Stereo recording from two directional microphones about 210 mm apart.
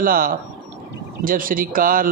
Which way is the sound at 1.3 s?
40° right (ahead or behind).